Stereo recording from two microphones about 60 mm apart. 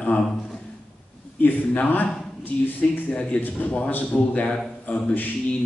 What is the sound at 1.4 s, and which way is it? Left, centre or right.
A man's voice, left.